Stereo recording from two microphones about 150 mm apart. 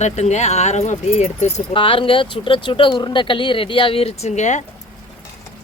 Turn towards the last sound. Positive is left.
turn(degrees=50)  # may be behind; listen again after turning